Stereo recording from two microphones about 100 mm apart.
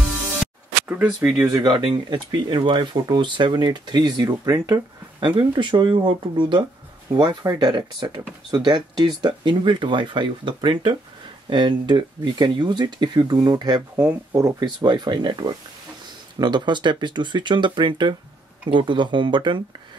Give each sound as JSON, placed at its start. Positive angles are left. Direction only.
{"t": 0.7, "sound": "a sound", "side_deg": -15}
{"t": 1.0, "sound": "speech", "side_deg": -5}
{"t": 1.5, "sound": "speech", "side_deg": -45}
{"t": 5.2, "sound": "speech", "side_deg": -50}
{"t": 7.2, "sound": "speech", "side_deg": -40}